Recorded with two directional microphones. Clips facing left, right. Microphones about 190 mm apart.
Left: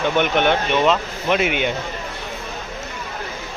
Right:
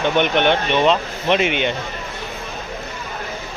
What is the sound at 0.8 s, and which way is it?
Speech, 25° right (ahead or behind).